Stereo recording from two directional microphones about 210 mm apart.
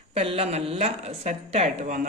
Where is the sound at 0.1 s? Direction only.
25° right (ahead or behind).